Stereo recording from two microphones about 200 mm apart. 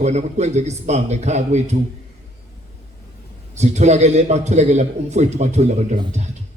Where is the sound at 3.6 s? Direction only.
35° right (ahead or behind).